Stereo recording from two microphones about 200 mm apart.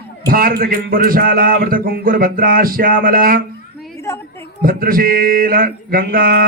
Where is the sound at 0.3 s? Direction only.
50° right (ahead or behind).